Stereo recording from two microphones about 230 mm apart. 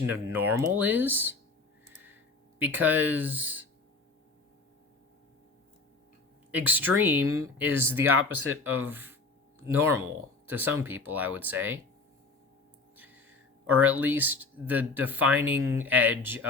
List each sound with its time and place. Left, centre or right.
0.1 s speech: centre
2.6 s speech: centre
6.5 s speech: centre
8.1 s speech: right
8.6 s speech: centre
10.4 s speech: centre
13.0 s a sound: centre
13.7 s speech: centre